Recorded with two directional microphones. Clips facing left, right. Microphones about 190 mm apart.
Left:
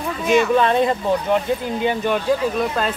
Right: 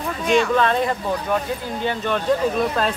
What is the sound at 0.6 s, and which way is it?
Speech, 20° left (ahead or behind).